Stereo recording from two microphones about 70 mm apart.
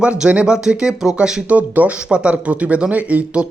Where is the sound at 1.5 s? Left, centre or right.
Right.